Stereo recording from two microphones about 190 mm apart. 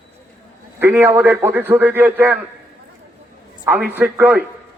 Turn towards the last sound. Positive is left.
turn(degrees=-10)  # may be behind; listen again after turning